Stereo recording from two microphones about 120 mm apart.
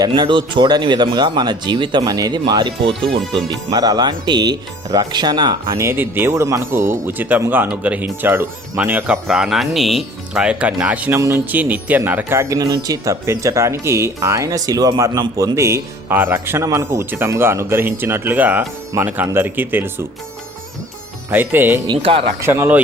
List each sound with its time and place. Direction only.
0.1 s speech: 40° right (ahead or behind)
15.5 s speech: 25° right (ahead or behind)
21.2 s speech: 15° right (ahead or behind)
22.0 s speech: 50° right (ahead or behind)
22.4 s speech: 20° right (ahead or behind)